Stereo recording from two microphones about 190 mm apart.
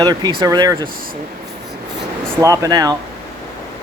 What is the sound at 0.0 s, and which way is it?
Speech, 20° right (ahead or behind).